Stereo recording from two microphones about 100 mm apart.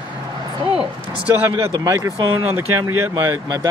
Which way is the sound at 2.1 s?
60° right (ahead or behind).